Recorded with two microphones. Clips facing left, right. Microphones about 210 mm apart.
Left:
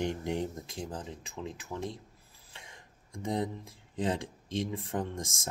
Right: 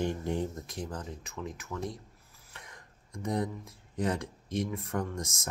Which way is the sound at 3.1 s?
25° left (ahead or behind).